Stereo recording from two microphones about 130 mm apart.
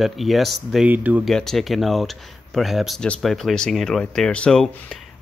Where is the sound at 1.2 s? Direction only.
5° left (ahead or behind).